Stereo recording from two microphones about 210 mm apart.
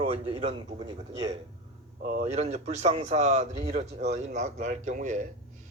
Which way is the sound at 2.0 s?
35° right (ahead or behind).